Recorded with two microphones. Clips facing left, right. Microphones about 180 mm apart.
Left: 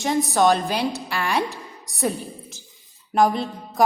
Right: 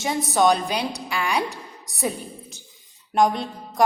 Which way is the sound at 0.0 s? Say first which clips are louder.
Left 1 dB; centre (ahead or behind).